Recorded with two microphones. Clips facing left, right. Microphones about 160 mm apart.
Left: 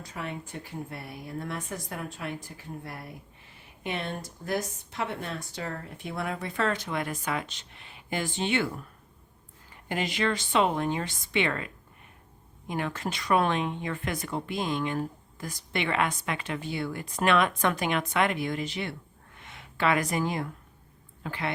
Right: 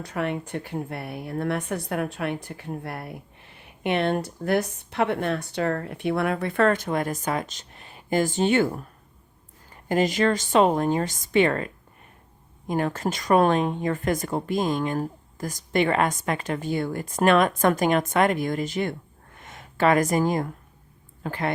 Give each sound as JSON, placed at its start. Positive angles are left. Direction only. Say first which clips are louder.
{"t": 0.0, "sound": "speech", "louder": "right 9 dB", "side_deg": -65}
{"t": 9.9, "sound": "a woman's voice", "louder": "right 7 dB", "side_deg": -40}